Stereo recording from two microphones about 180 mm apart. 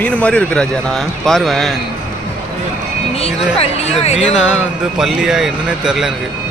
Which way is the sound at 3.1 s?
35° left (ahead or behind).